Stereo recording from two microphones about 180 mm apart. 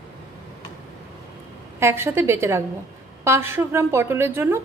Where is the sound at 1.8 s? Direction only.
15° right (ahead or behind).